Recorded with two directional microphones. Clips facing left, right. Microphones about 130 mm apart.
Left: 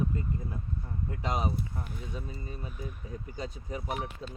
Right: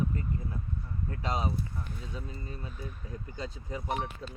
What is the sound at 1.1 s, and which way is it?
Speech, 15° left (ahead or behind).